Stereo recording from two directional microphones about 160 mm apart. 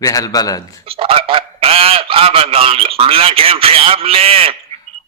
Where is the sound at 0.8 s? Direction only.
35° right (ahead or behind).